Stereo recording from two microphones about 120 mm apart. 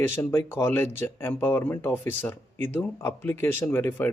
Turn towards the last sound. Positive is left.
turn(degrees=15)  # may be behind; listen again after turning